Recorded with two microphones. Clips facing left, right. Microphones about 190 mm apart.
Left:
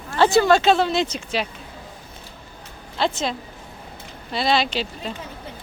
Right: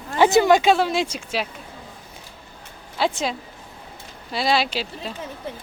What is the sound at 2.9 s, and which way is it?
Speech, 10° right (ahead or behind).